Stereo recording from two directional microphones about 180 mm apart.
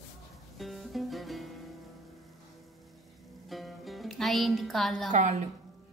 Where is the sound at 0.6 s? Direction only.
Centre (ahead or behind).